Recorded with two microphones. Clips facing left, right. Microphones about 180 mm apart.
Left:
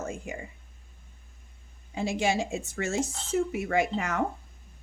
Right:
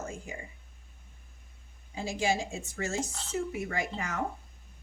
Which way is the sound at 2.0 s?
70° left (ahead or behind).